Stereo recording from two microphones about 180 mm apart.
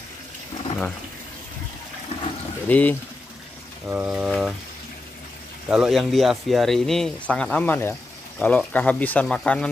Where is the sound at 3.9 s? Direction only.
5° right (ahead or behind).